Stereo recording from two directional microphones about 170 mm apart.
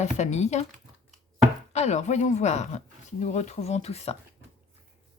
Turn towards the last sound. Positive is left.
turn(degrees=40)  # may be behind; listen again after turning